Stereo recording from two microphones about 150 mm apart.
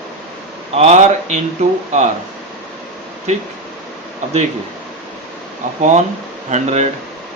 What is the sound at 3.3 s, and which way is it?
Speech, 50° right (ahead or behind).